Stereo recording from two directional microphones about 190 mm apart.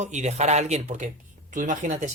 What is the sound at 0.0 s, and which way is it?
Speech, 40° right (ahead or behind).